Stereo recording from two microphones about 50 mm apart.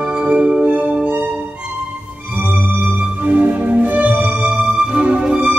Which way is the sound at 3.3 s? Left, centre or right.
Right.